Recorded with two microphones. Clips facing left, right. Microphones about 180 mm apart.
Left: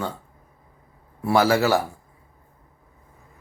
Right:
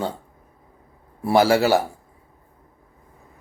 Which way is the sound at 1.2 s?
30° right (ahead or behind).